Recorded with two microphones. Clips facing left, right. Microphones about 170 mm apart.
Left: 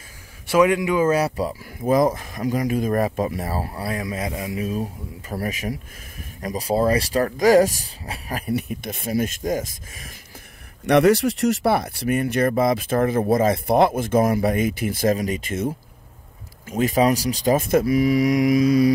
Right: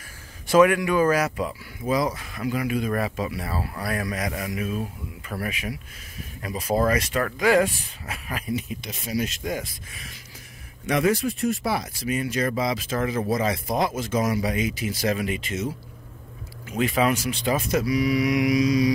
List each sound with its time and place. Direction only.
0.6 s speech: 20° left (ahead or behind); by 1.6 s 35° left (ahead or behind)
1.9 s speech: 50° left (ahead or behind)
8.5 s speech: 60° left (ahead or behind)
10.9 s speech: 70° left (ahead or behind); by 18.9 s 55° left (ahead or behind)